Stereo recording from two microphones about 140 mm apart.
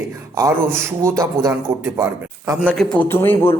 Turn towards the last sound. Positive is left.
turn(degrees=15)  # may be behind; listen again after turning